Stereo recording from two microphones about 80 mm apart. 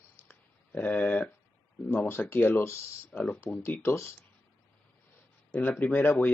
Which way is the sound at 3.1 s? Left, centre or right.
Centre.